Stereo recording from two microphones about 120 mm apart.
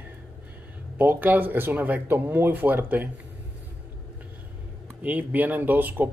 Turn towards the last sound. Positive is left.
turn(degrees=-15)  # may be behind; listen again after turning